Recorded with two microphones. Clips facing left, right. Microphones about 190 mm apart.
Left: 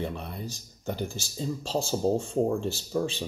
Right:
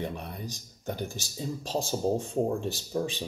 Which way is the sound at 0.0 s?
15° right (ahead or behind).